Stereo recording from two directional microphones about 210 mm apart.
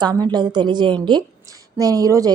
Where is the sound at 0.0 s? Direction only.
20° right (ahead or behind).